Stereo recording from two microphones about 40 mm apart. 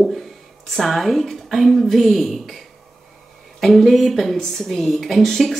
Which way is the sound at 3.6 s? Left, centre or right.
Centre.